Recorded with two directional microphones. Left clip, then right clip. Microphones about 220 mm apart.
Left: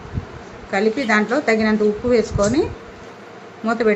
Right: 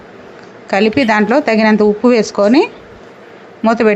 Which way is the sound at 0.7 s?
45° right (ahead or behind).